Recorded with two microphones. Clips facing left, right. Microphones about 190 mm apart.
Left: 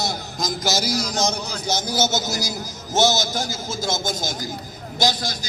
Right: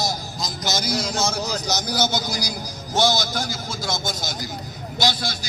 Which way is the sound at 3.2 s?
25° left (ahead or behind).